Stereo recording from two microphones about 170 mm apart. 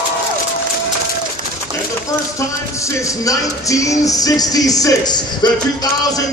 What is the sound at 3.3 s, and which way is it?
Speech, 20° left (ahead or behind).